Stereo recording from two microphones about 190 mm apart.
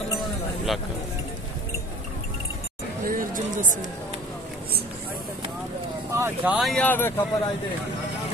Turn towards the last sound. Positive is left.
turn(degrees=10)  # may be behind; listen again after turning